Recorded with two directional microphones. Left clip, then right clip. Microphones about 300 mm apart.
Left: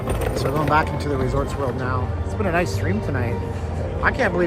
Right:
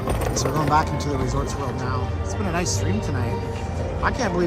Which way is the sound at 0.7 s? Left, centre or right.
Centre.